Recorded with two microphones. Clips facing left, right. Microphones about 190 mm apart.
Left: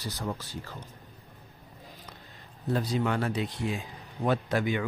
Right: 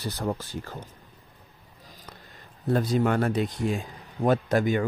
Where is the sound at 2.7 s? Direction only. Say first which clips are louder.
Right 5 dB; 50° right (ahead or behind).